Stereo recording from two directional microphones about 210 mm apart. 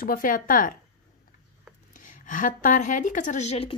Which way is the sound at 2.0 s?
40° left (ahead or behind).